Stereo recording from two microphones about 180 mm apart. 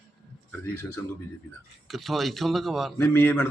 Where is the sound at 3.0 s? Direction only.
10° left (ahead or behind).